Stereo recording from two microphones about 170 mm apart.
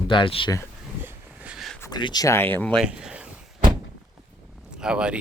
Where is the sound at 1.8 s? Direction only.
25° left (ahead or behind); by 2.8 s 10° left (ahead or behind).